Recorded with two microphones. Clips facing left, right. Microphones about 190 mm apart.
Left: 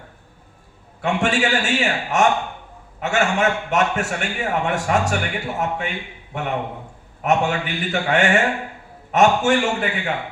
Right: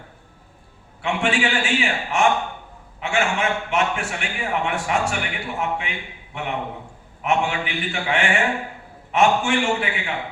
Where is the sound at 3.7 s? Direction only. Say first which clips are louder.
Left 3 dB; 40° left (ahead or behind).